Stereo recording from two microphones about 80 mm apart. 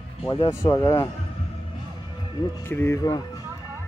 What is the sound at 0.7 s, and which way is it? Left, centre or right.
Speech, left.